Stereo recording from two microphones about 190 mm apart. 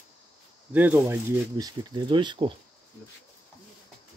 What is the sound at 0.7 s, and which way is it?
Speech, 10° right (ahead or behind).